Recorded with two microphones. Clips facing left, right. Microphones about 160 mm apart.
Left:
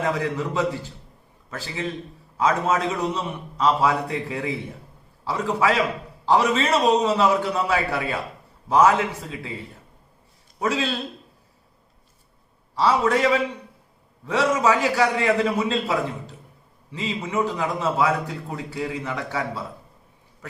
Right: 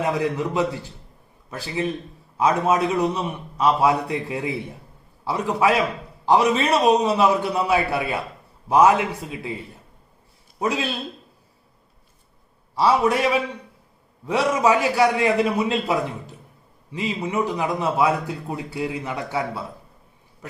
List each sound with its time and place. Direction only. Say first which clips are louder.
0.0 s a man's voice: right 2 dB; 15° right (ahead or behind)
10.6 s a man's voice: even; 15° right (ahead or behind)
12.7 s a man's voice: right 1 dB; 15° right (ahead or behind)